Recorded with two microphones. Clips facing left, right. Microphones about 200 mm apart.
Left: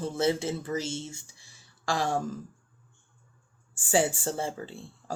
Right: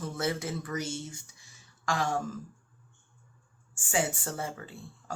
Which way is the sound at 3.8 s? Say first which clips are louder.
Left 5 dB; 35° left (ahead or behind).